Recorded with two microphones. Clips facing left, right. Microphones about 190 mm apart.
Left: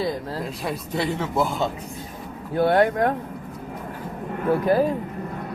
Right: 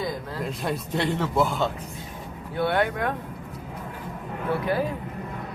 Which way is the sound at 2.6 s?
40° left (ahead or behind).